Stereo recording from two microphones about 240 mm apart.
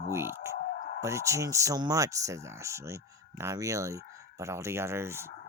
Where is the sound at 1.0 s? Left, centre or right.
Centre.